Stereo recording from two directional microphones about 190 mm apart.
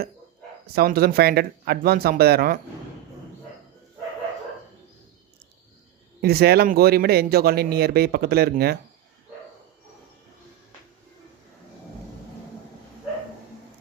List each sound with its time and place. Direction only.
0.8 s speech: 55° right (ahead or behind)
6.2 s speech: 55° right (ahead or behind)